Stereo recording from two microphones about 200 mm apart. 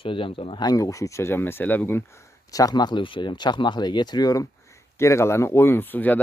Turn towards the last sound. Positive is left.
turn(degrees=10)  # may be behind; listen again after turning